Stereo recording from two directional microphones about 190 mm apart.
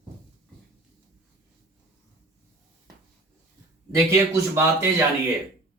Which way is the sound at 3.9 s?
15° right (ahead or behind).